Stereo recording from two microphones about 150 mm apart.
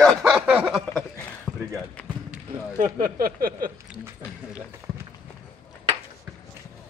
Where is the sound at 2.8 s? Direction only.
75° right (ahead or behind).